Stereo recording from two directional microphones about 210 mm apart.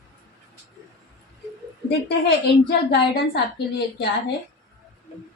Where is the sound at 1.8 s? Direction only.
50° left (ahead or behind).